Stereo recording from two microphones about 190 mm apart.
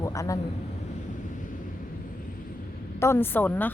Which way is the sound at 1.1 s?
45° left (ahead or behind).